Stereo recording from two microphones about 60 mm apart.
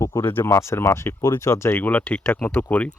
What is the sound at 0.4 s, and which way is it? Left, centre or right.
Speech, left.